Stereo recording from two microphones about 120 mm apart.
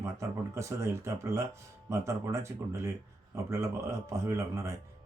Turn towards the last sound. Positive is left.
turn(degrees=-25)  # may be behind; listen again after turning